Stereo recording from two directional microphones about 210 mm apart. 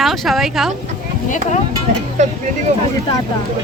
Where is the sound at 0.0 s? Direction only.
Centre (ahead or behind).